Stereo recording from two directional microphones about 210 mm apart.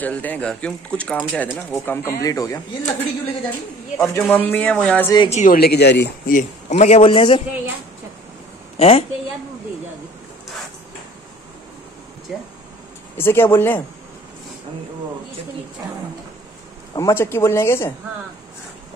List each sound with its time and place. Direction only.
0.0 s speech: 5° left (ahead or behind)
2.8 s a man's voice: 30° left (ahead or behind)
4.0 s speech: 5° left (ahead or behind)
5.1 s a man's voice: 20° left (ahead or behind)
5.4 s speech: 45° left (ahead or behind)
6.7 s a man's voice: 30° left (ahead or behind)
8.7 s a woman's voice: 25° left (ahead or behind)
13.2 s speech: 10° left (ahead or behind)
16.9 s speech: 15° left (ahead or behind)